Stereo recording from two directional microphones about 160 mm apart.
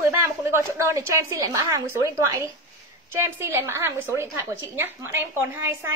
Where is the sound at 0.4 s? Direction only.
15° right (ahead or behind).